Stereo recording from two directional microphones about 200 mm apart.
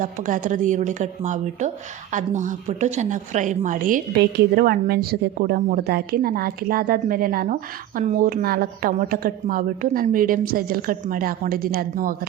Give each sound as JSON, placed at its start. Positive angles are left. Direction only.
{"t": 0.0, "sound": "a woman's voice", "side_deg": -40}